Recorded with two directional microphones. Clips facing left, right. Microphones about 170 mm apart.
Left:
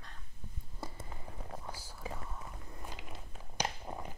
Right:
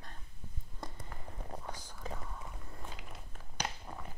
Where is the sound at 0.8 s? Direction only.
5° left (ahead or behind).